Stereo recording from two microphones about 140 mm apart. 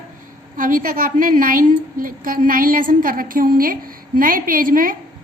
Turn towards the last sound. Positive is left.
turn(degrees=-85)